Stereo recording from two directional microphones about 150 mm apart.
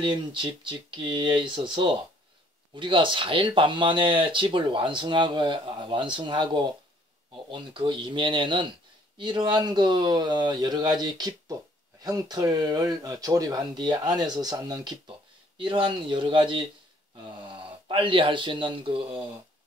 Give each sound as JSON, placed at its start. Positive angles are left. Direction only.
{"t": 0.0, "sound": "speech", "side_deg": -35}